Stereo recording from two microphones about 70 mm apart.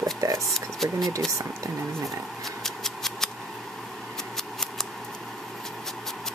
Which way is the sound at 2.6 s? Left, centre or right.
Centre.